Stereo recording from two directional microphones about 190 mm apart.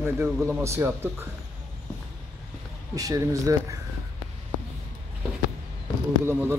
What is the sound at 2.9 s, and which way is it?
Speech, 20° right (ahead or behind).